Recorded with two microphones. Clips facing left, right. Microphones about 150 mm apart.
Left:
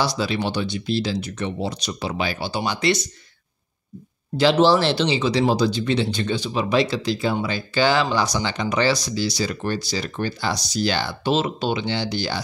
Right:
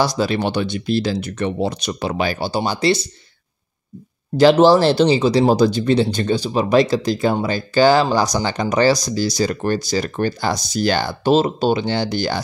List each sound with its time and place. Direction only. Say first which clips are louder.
0.0 s speech: right 4 dB; 45° right (ahead or behind); by 3.1 s 30° right (ahead or behind)
4.4 s speech: right 5 dB; 45° right (ahead or behind)